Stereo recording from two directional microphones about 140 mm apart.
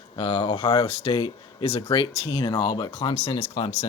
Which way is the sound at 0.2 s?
40° left (ahead or behind).